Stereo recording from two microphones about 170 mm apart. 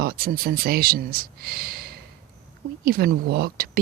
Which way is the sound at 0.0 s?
60° right (ahead or behind).